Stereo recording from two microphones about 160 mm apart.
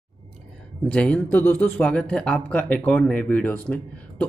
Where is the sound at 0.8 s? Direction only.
5° left (ahead or behind).